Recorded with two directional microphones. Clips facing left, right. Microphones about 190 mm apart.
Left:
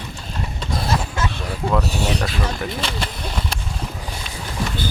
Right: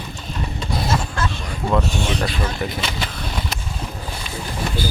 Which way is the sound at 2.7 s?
Centre (ahead or behind).